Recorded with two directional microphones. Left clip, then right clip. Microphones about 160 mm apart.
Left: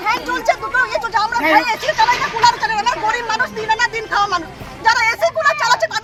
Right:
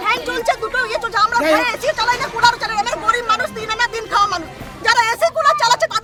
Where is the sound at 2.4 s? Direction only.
40° right (ahead or behind).